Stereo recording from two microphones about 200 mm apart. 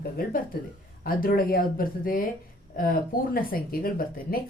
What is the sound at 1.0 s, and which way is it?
Speech, 45° left (ahead or behind).